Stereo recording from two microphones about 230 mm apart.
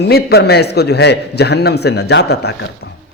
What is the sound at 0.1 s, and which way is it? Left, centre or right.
A man's voice, left.